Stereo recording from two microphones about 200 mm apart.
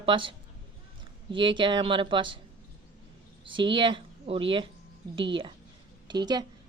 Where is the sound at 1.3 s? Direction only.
25° right (ahead or behind).